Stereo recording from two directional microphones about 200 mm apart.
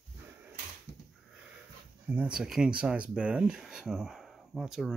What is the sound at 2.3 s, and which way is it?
Speech, 5° right (ahead or behind).